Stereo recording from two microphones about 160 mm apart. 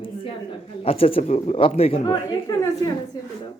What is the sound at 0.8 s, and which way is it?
Speech, 35° left (ahead or behind).